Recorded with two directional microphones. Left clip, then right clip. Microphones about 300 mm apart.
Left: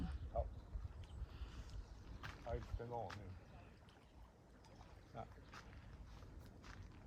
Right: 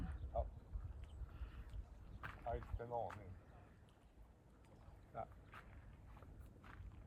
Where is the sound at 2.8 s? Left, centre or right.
Centre.